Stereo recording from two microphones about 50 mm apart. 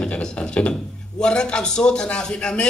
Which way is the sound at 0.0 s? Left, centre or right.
Centre.